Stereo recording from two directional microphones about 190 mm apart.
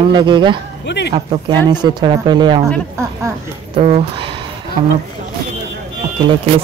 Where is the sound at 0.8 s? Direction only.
65° left (ahead or behind).